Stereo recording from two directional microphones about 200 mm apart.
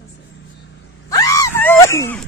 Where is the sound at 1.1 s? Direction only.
15° left (ahead or behind).